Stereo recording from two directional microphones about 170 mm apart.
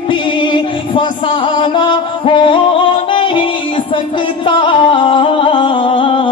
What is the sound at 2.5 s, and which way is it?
Yodeling, 30° left (ahead or behind).